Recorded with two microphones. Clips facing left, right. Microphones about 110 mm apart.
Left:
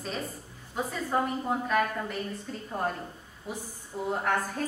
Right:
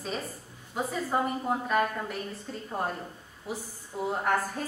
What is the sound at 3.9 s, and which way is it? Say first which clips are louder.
Speech: right 1 dB; 5° right (ahead or behind).